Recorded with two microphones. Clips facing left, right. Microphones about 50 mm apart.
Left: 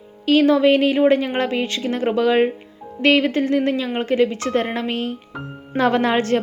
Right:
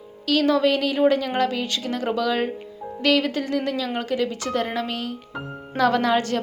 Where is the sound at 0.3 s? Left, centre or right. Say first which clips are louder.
Left 5 dB; left.